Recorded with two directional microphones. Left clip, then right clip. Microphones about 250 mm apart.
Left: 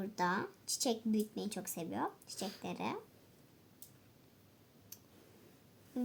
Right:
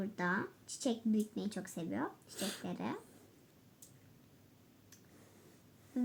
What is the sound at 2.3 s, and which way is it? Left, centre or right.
Speech, right.